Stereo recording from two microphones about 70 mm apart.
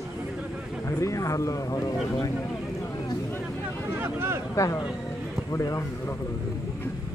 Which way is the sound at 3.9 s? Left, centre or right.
Right.